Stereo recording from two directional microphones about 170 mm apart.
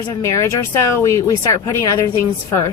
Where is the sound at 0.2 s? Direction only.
15° left (ahead or behind).